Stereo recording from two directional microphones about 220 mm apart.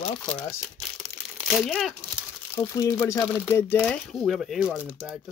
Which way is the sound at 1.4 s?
Centre (ahead or behind).